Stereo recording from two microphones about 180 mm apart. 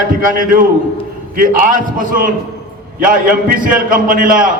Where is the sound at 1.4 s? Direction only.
50° right (ahead or behind).